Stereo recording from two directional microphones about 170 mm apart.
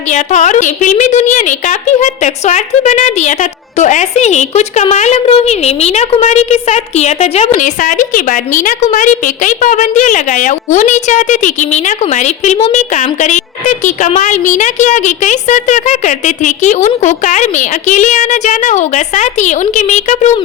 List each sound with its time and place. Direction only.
0.1 s a woman's voice: 45° left (ahead or behind)